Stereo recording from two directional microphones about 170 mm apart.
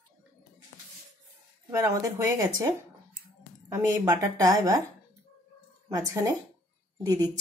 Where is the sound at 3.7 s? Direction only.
20° right (ahead or behind).